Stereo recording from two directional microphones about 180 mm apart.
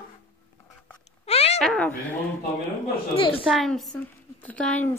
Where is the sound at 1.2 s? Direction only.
35° left (ahead or behind).